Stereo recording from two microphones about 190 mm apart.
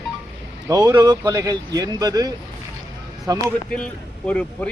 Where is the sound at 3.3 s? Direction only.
20° right (ahead or behind).